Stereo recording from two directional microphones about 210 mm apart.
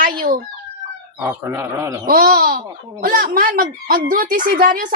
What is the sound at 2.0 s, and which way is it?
Speech, 45° right (ahead or behind).